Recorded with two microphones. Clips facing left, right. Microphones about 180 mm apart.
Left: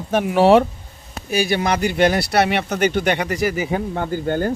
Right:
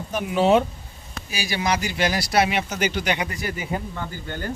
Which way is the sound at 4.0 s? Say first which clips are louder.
Left 11 dB; 50° left (ahead or behind).